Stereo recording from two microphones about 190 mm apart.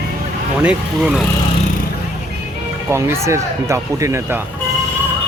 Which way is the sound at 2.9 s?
15° right (ahead or behind).